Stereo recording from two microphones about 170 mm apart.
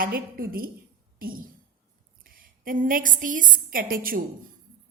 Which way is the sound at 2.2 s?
55° right (ahead or behind).